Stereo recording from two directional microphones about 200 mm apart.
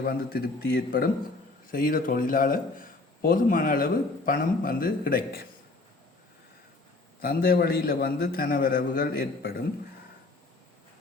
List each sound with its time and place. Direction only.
0.0 s a man's voice: 50° left (ahead or behind)
7.2 s a man's voice: 45° left (ahead or behind)